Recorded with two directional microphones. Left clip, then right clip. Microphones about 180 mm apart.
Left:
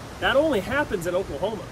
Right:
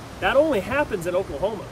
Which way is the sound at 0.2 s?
5° right (ahead or behind).